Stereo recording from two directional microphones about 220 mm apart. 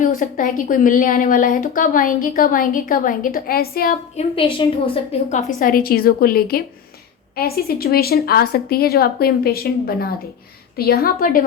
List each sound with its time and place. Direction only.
0.0 s a woman's voice: 35° left (ahead or behind)
4.2 s a woman's voice: 25° left (ahead or behind); by 11.4 s 40° left (ahead or behind)